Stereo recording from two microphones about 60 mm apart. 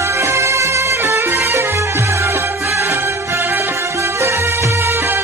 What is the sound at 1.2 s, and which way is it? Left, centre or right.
Music, right.